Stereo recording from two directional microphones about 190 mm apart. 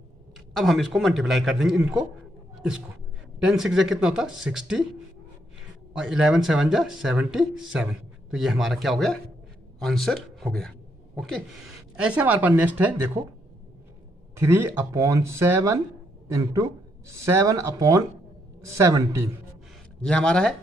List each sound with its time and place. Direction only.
0.6 s speech: centre (ahead or behind)
3.4 s speech: centre (ahead or behind)
5.9 s a man's voice: centre (ahead or behind)
14.4 s speech: 10° right (ahead or behind)
17.2 s speech: 15° right (ahead or behind)
20.0 s speech: 5° left (ahead or behind)